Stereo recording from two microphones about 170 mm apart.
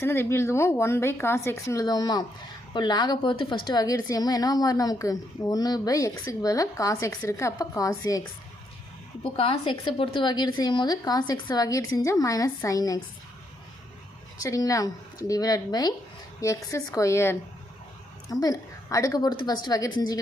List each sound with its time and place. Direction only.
0.0 s a woman's voice: 15° left (ahead or behind)
9.2 s a woman's voice: 30° left (ahead or behind)
14.4 s a woman's voice: 20° left (ahead or behind)